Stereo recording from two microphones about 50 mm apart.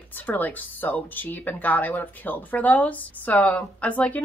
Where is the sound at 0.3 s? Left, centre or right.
Left.